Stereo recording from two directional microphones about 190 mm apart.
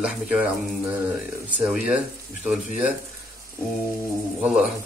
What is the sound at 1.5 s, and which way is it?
Speech, 5° right (ahead or behind).